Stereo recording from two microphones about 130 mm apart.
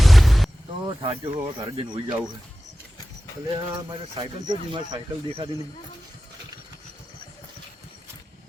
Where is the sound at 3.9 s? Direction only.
35° right (ahead or behind).